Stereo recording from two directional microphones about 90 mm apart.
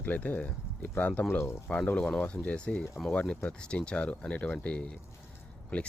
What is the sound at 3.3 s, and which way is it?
Speech, 10° left (ahead or behind).